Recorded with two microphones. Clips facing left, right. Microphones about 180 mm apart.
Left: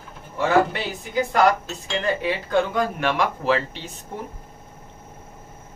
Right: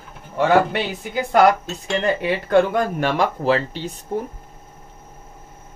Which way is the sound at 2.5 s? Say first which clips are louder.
Right 6 dB; 50° right (ahead or behind).